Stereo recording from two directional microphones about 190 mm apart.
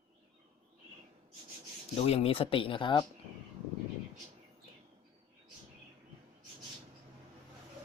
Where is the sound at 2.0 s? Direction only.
30° left (ahead or behind).